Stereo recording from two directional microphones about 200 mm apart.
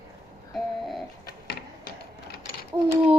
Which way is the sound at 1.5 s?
45° left (ahead or behind).